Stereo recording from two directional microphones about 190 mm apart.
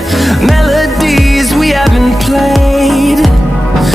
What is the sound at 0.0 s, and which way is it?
Music, centre (ahead or behind).